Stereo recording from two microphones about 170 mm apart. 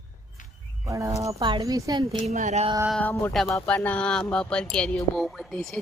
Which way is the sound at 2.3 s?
40° right (ahead or behind).